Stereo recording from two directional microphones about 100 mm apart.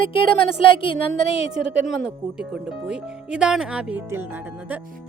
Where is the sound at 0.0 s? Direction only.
60° left (ahead or behind).